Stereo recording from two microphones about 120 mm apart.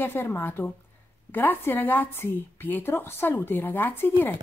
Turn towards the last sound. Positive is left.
turn(degrees=15)  # may be behind; listen again after turning